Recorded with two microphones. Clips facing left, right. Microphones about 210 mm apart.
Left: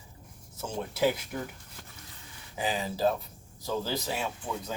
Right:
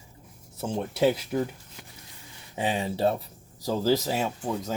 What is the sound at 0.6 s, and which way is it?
Speech, 30° right (ahead or behind).